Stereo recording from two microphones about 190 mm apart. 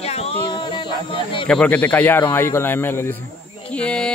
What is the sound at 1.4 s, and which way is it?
A man's voice, 5° left (ahead or behind).